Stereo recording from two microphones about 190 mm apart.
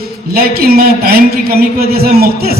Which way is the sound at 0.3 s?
55° right (ahead or behind).